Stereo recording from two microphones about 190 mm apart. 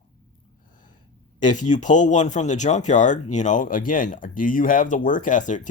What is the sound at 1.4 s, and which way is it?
Speech, 40° left (ahead or behind).